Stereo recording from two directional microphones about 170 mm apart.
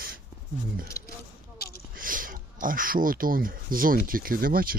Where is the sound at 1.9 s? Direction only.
55° right (ahead or behind).